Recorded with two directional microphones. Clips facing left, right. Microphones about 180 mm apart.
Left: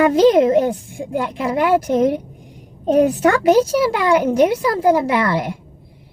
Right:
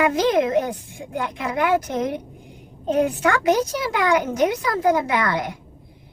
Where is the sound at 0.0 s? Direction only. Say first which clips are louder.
Left 7 dB; 30° left (ahead or behind).